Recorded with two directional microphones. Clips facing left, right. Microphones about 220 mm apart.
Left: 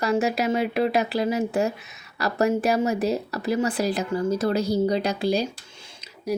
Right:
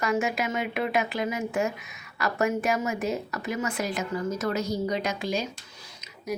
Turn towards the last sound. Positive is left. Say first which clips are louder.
# left 6 dB
turn(degrees=30)  # may be behind; listen again after turning